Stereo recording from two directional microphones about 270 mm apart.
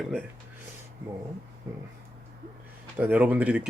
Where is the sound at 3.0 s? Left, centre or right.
Centre.